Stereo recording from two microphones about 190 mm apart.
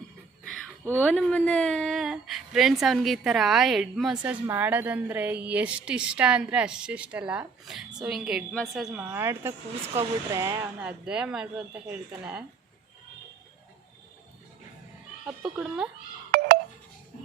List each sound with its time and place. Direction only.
1.0 s a woman's voice: 5° left (ahead or behind)
15.4 s a woman's voice: 5° right (ahead or behind)
16.3 s telephone dialing: 50° right (ahead or behind)